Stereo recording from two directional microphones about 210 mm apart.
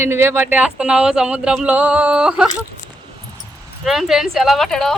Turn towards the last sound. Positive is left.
turn(degrees=0)  # may be behind; listen again after turning